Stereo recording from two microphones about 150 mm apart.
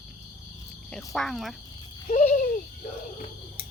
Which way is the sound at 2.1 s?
55° left (ahead or behind).